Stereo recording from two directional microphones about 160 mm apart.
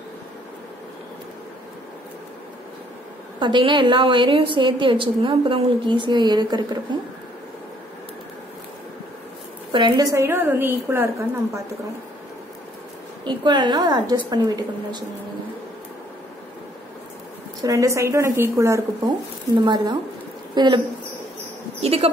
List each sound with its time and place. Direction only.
3.3 s a woman's voice: 30° right (ahead or behind)
9.7 s a woman's voice: 30° right (ahead or behind)
10.1 s a woman's voice: 15° right (ahead or behind)
13.2 s speech: 30° right (ahead or behind)
17.6 s speech: 20° right (ahead or behind)
21.8 s a woman's voice: 40° right (ahead or behind)